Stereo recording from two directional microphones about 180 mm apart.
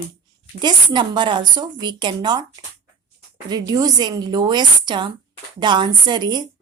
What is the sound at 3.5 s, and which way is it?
A woman's voice, 20° right (ahead or behind).